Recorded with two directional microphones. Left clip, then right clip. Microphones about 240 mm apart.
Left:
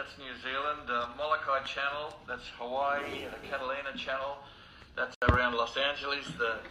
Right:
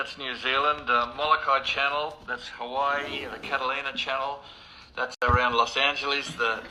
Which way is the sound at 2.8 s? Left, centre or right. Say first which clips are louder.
Right 6 dB; right.